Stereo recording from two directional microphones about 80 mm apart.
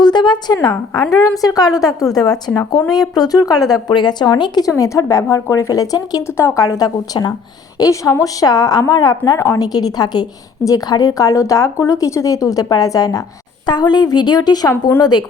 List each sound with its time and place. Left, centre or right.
0.0 s a woman's voice: left
4.8 s a woman's voice: left
6.2 s a woman's voice: left
7.8 s a woman's voice: left
9.4 s a woman's voice: left
13.7 s a woman's voice: left
14.7 s a woman's voice: left